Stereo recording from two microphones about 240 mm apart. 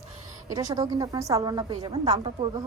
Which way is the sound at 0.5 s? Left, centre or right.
Centre.